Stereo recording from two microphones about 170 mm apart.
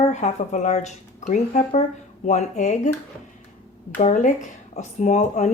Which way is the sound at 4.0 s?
45° left (ahead or behind).